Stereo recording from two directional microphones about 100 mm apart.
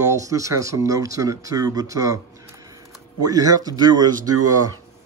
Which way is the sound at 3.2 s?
40° right (ahead or behind).